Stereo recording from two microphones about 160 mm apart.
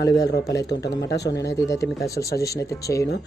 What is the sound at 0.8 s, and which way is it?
Speech, 90° left.